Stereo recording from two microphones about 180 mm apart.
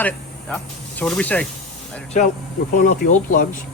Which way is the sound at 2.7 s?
45° left (ahead or behind).